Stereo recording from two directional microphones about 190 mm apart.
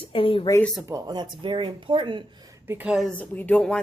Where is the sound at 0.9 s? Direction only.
20° right (ahead or behind).